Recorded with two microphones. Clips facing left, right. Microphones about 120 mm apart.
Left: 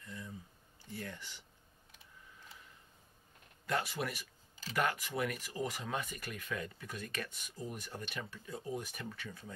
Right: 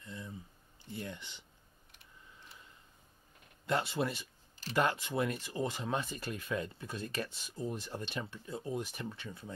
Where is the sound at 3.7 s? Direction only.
25° right (ahead or behind).